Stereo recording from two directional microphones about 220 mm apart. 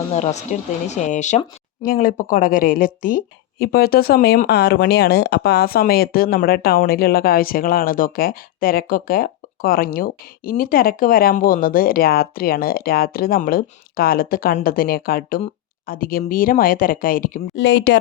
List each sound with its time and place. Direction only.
0.1 s speech: 30° left (ahead or behind)
17.5 s speech: 55° left (ahead or behind)